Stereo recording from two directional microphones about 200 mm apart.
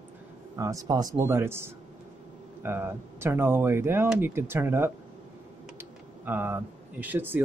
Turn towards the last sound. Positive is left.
turn(degrees=-10)  # may be behind; listen again after turning